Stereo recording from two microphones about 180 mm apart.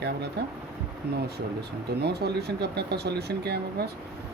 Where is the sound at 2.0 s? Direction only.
65° right (ahead or behind).